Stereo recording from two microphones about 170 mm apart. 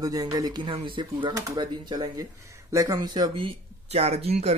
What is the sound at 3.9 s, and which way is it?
Speech, 35° right (ahead or behind).